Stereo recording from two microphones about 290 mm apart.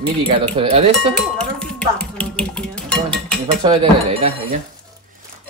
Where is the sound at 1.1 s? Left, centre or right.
Centre.